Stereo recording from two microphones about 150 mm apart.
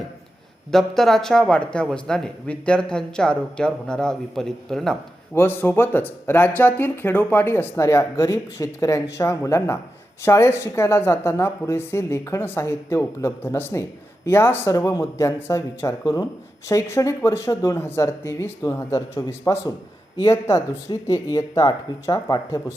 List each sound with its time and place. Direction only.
0.7 s speech: centre (ahead or behind)
5.3 s speech: 15° left (ahead or behind)